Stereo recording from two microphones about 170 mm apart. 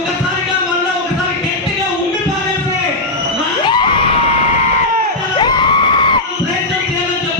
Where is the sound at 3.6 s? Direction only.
30° left (ahead or behind).